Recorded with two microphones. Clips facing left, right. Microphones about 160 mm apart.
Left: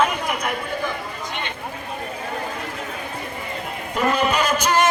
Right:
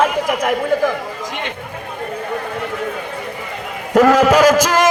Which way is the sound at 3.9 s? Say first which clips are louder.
Right 10 dB; 90° right.